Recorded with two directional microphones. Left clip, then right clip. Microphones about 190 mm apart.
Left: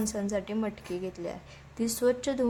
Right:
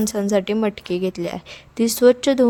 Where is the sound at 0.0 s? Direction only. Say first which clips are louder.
Right 12 dB; 45° right (ahead or behind).